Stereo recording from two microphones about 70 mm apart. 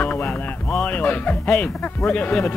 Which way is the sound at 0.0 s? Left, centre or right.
Left.